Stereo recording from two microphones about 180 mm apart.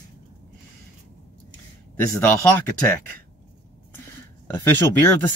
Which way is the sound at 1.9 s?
10° left (ahead or behind).